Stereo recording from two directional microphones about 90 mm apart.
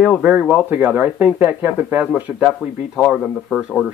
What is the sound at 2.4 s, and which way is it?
Speech, 5° right (ahead or behind).